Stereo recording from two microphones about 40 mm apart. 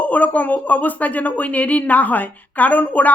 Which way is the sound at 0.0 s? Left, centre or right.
Left.